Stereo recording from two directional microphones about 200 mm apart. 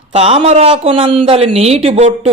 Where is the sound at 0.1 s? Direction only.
30° right (ahead or behind).